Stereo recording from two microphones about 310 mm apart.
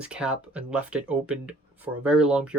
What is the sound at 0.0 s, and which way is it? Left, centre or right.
Speech, centre.